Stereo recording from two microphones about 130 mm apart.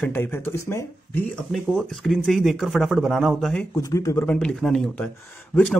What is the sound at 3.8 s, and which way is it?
Speech, 25° left (ahead or behind).